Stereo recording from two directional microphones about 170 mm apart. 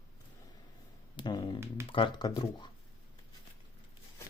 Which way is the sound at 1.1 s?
25° left (ahead or behind).